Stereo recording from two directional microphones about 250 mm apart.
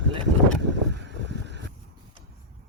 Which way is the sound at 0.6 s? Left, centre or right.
Right.